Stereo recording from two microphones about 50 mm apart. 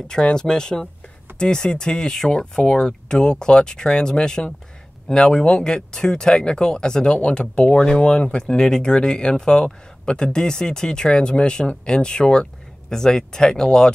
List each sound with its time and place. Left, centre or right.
0.1 s speech: centre